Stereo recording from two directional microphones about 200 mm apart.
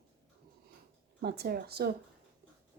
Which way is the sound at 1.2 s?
55° right (ahead or behind).